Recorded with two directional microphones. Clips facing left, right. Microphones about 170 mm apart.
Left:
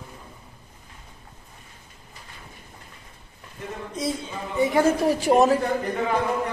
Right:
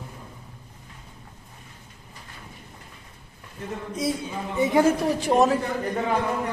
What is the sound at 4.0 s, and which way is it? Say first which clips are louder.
Speech: right 1 dB; 10° right (ahead or behind).